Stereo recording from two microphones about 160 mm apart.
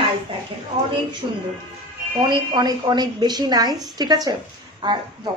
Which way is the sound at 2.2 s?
25° right (ahead or behind).